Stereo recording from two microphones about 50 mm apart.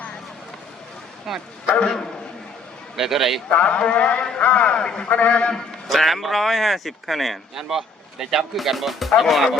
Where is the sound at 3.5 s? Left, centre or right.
Left.